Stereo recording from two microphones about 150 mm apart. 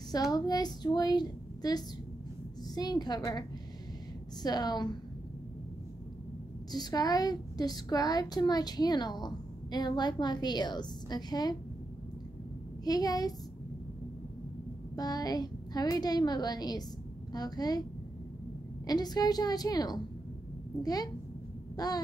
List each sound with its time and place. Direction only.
0.3 s a woman's voice: 25° left (ahead or behind)
4.4 s a woman's voice: 25° left (ahead or behind)
6.7 s a woman's voice: 25° left (ahead or behind)
12.8 s a woman's voice: 25° left (ahead or behind)
15.0 s a woman's voice: 25° left (ahead or behind)
18.9 s a woman's voice: 25° left (ahead or behind)
21.7 s a sound: 25° left (ahead or behind)